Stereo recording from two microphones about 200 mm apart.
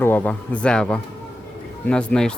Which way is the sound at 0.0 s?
10° left (ahead or behind).